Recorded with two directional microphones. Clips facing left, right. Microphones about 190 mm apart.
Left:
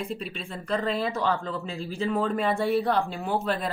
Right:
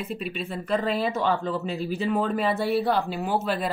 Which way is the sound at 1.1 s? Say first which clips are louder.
Right 2 dB; 20° right (ahead or behind).